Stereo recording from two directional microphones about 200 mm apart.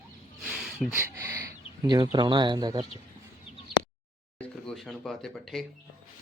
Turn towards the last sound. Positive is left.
turn(degrees=0)  # may be behind; listen again after turning